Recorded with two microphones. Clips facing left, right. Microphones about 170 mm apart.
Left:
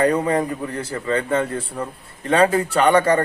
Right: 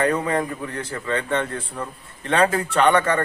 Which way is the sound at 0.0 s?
10° left (ahead or behind).